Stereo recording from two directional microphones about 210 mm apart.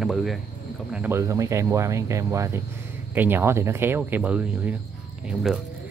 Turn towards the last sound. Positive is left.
turn(degrees=0)  # may be behind; listen again after turning